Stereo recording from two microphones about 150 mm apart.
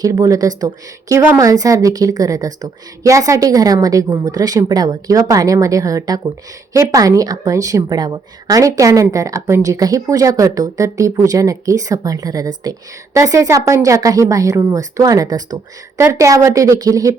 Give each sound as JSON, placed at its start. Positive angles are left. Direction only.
{"t": 0.0, "sound": "a woman's voice", "side_deg": -20}